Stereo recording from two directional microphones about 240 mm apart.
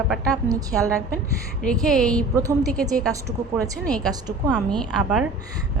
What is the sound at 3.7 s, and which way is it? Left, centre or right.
Speech, centre.